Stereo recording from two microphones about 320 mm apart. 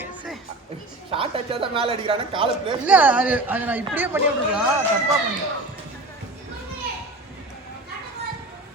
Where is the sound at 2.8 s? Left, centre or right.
Centre.